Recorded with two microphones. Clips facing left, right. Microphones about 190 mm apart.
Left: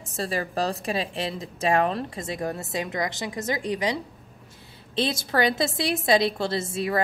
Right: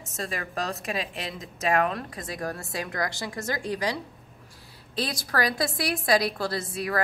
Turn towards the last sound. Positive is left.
turn(degrees=25)  # may be behind; listen again after turning